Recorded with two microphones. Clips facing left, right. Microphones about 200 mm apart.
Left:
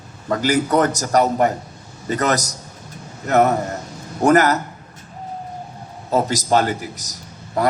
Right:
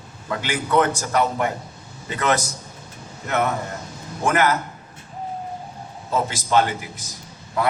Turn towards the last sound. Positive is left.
turn(degrees=40)  # may be behind; listen again after turning